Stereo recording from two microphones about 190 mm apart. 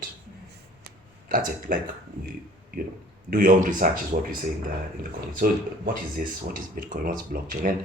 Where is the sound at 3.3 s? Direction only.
45° right (ahead or behind).